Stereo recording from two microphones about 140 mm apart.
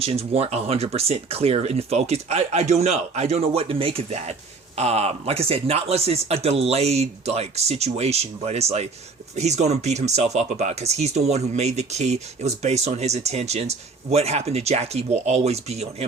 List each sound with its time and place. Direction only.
0.0 s speech: 45° right (ahead or behind)